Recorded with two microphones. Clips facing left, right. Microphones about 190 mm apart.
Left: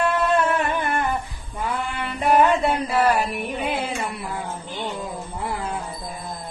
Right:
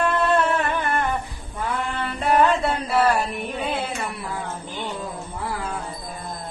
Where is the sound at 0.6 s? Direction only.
15° left (ahead or behind).